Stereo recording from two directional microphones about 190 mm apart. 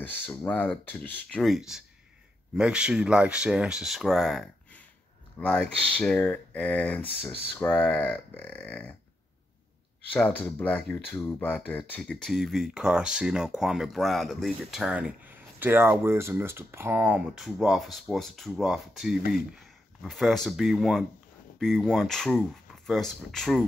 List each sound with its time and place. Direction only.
0.0 s speech: 10° left (ahead or behind)
10.1 s speech: 5° left (ahead or behind)